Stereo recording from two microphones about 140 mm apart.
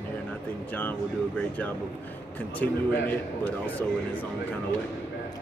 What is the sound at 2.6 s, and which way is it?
Speech, 10° left (ahead or behind).